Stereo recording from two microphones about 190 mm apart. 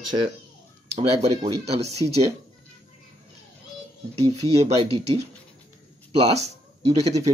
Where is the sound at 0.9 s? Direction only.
35° right (ahead or behind).